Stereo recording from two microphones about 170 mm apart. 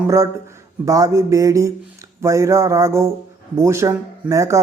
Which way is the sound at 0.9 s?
20° right (ahead or behind).